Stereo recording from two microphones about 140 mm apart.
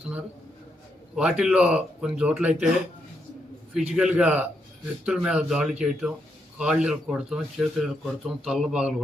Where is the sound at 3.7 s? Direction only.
5° right (ahead or behind).